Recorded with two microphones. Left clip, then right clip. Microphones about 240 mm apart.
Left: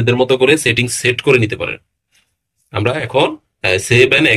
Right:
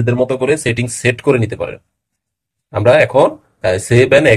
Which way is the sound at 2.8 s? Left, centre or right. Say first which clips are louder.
Right 6 dB; right.